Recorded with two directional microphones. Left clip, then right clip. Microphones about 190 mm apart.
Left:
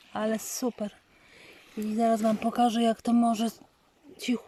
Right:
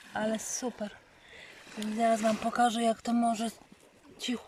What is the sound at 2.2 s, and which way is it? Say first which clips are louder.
Speech: left 2 dB; 10° left (ahead or behind).